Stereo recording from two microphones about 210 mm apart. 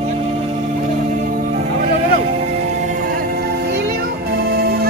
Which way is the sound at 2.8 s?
40° right (ahead or behind).